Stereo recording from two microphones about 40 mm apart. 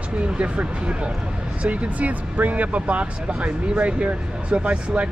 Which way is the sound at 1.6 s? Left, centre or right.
Right.